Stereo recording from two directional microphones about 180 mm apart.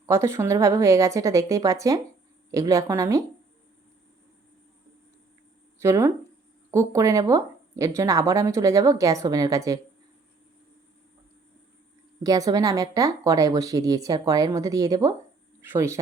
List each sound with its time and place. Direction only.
0.0 s a woman's voice: 15° right (ahead or behind)
5.8 s a woman's voice: 15° right (ahead or behind)
12.2 s a woman's voice: 20° right (ahead or behind)